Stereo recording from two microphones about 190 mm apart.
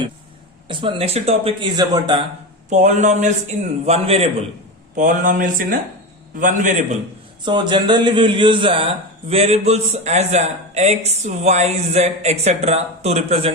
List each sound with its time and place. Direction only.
0.7 s a man's voice: 25° right (ahead or behind)
2.6 s a man's voice: 40° right (ahead or behind)
4.9 s a man's voice: 45° right (ahead or behind)
7.4 s a man's voice: 25° right (ahead or behind)